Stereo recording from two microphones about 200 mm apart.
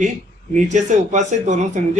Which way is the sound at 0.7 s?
35° right (ahead or behind).